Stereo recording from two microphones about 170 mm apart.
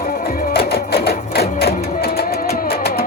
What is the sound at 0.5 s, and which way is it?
Music, 65° left (ahead or behind).